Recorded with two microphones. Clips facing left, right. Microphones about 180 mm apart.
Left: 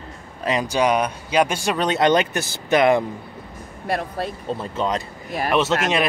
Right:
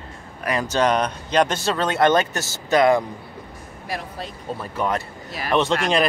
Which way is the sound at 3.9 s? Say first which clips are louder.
Left 6 dB; 60° left (ahead or behind).